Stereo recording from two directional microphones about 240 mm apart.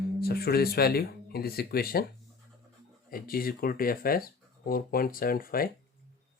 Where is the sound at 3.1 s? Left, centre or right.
Left.